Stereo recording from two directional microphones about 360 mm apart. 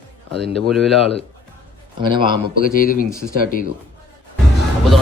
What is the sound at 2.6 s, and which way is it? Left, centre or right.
Speech, left.